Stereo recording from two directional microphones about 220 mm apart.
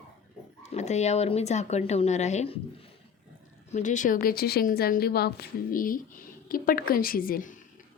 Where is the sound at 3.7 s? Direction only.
35° left (ahead or behind).